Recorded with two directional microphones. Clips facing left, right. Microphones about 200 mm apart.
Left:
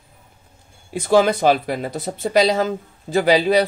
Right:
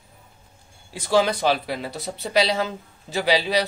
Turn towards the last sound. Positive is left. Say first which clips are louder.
# left 6 dB
turn(degrees=50)  # may be behind; listen again after turning